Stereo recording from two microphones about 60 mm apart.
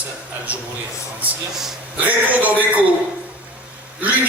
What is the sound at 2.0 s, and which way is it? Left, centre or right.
Speech, right.